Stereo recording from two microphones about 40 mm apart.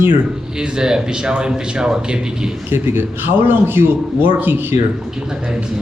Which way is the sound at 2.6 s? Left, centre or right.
Right.